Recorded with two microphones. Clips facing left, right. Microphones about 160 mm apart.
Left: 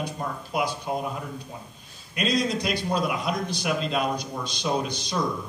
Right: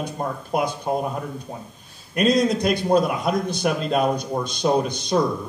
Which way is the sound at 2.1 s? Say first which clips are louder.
Right 7 dB; 50° right (ahead or behind).